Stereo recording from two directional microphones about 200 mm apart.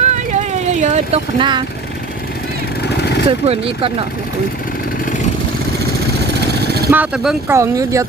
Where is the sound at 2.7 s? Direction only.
55° left (ahead or behind).